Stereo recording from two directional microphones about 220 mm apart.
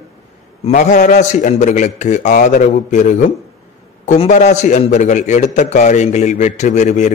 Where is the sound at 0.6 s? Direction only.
35° left (ahead or behind).